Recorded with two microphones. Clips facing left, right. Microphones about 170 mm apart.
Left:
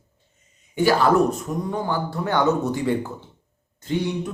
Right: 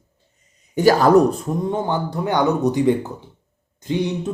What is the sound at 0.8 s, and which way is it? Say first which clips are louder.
Speech: right 4 dB; 40° right (ahead or behind).